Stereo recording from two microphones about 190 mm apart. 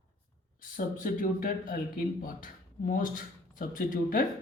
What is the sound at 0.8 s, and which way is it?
Speech, 45° left (ahead or behind).